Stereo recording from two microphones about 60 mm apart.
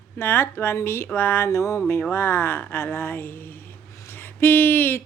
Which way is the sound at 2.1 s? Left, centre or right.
Left.